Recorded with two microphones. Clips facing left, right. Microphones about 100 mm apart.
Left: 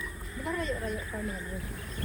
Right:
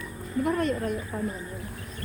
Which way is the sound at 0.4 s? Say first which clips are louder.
Right 6 dB; 60° right (ahead or behind).